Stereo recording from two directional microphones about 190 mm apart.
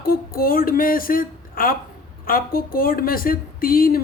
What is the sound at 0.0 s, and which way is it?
A woman's voice, 50° left (ahead or behind).